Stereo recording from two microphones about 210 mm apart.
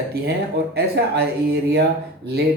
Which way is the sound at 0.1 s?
50° right (ahead or behind).